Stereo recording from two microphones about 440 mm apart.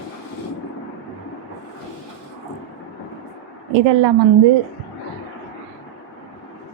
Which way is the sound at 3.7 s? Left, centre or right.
Right.